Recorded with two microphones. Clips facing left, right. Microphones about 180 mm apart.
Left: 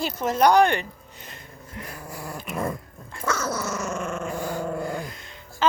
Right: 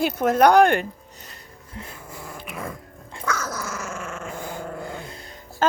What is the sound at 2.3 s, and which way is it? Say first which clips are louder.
Growling: left 5 dB; 45° left (ahead or behind).